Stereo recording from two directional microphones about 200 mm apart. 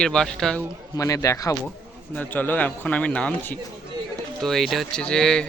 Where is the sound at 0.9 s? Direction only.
15° left (ahead or behind).